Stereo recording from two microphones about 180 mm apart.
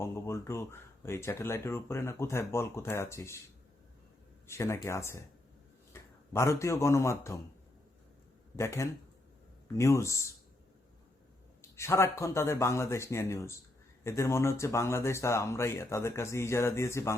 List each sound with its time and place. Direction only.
0.0 s speech: 15° left (ahead or behind)
4.4 s speech: 15° left (ahead or behind)
8.5 s speech: 15° left (ahead or behind)
11.8 s speech: 15° left (ahead or behind)